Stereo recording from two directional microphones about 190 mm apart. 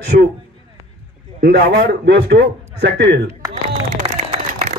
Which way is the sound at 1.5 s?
60° right (ahead or behind).